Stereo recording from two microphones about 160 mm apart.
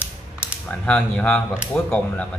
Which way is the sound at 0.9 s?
10° left (ahead or behind).